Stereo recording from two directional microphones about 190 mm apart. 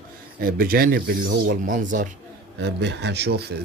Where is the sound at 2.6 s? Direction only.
65° right (ahead or behind).